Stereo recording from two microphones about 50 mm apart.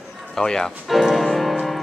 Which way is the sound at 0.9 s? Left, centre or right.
Centre.